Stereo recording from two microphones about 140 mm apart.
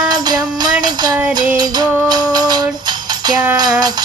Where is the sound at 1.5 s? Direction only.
30° right (ahead or behind).